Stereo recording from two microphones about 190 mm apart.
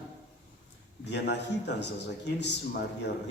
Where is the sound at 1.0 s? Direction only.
65° left (ahead or behind).